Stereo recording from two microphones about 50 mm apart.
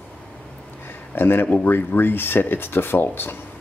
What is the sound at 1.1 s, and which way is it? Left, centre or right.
Speech, left.